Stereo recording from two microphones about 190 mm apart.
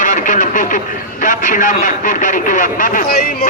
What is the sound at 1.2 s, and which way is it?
A man's voice, 45° left (ahead or behind).